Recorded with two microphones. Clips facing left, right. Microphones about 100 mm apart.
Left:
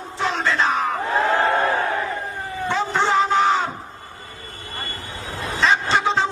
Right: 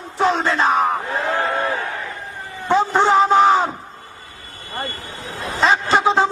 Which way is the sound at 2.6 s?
45° right (ahead or behind).